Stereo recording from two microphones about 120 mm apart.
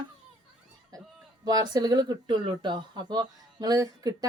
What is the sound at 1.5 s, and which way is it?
Speech, 35° right (ahead or behind).